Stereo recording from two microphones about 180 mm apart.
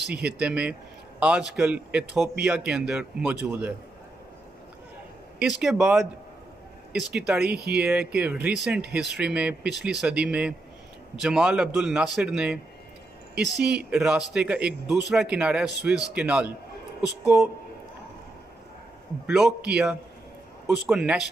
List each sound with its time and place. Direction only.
0.4 s speech: 5° right (ahead or behind)
5.4 s speech: centre (ahead or behind)
7.2 s speech: 5° right (ahead or behind)
7.4 s speech: 60° right (ahead or behind)
7.7 s speech: 5° right (ahead or behind)
13.3 s speech: 65° right (ahead or behind)
13.8 s speech: 5° right (ahead or behind)
19.3 s speech: 5° right (ahead or behind)